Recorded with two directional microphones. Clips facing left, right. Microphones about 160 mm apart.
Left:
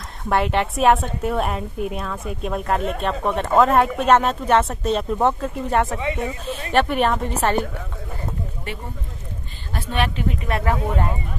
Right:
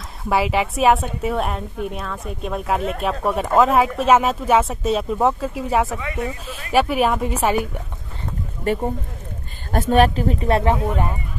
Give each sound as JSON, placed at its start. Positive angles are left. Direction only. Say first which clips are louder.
{"t": 0.2, "sound": "a woman's voice", "louder": "right 1 dB", "side_deg": -5}
{"t": 8.7, "sound": "speech", "louder": "right 11 dB", "side_deg": -40}